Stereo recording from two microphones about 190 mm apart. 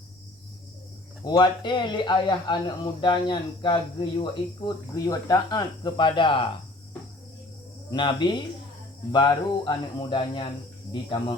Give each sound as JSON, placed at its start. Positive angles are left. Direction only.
{"t": 1.2, "sound": "speech", "side_deg": 20}
{"t": 7.9, "sound": "speech", "side_deg": 25}